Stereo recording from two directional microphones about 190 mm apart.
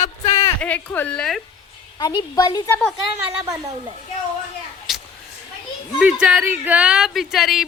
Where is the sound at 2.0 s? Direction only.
20° left (ahead or behind).